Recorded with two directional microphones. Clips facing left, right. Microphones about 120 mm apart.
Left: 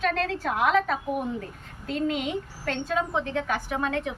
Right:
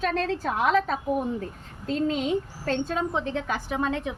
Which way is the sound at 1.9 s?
30° right (ahead or behind).